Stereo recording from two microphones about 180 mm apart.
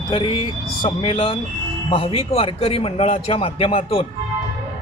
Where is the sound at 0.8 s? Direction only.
25° left (ahead or behind).